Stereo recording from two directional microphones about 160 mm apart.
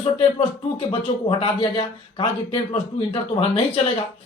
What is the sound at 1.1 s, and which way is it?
A man's voice, 40° left (ahead or behind).